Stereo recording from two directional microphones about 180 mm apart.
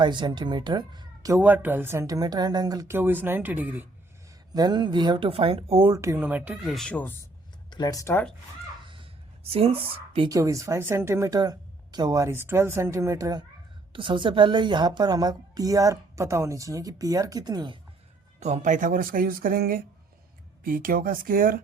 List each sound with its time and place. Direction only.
0.0 s a woman's voice: 25° right (ahead or behind)
1.4 s speech: 10° right (ahead or behind)
4.5 s a woman's voice: 25° right (ahead or behind)
5.9 s speech: 15° right (ahead or behind); by 7.1 s 5° left (ahead or behind)
7.7 s speech: 20° left (ahead or behind)
9.5 s a woman's voice: 30° right (ahead or behind)
18.3 s speech: 40° right (ahead or behind)